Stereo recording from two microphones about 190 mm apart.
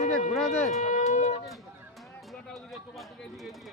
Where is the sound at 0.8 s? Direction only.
40° left (ahead or behind).